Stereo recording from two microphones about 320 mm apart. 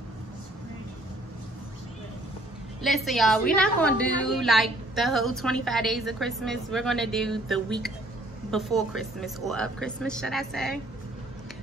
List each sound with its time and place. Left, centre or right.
2.8 s a woman's voice: centre